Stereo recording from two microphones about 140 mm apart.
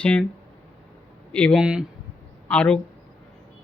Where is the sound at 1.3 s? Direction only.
5° left (ahead or behind).